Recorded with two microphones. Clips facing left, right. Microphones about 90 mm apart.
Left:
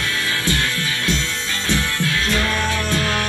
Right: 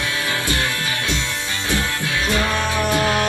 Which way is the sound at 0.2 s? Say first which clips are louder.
Left 1 dB; 20° right (ahead or behind).